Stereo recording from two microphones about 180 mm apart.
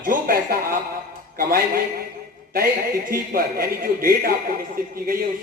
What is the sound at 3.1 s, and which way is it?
A man's voice, 55° right (ahead or behind).